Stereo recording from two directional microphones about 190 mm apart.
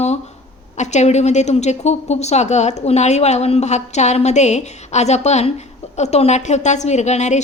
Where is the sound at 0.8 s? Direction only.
35° left (ahead or behind).